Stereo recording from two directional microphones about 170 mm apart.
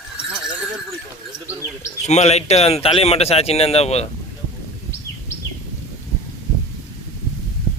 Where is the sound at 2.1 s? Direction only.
40° left (ahead or behind).